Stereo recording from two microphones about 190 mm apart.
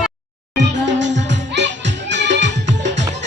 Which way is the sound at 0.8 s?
70° right (ahead or behind).